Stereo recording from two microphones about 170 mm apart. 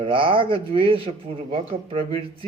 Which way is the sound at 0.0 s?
30° right (ahead or behind).